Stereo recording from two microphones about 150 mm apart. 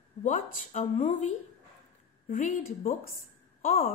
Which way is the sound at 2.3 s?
55° left (ahead or behind).